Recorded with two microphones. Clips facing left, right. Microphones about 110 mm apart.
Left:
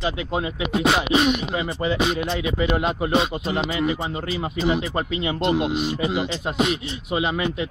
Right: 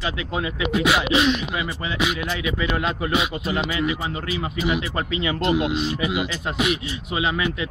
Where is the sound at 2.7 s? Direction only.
25° left (ahead or behind).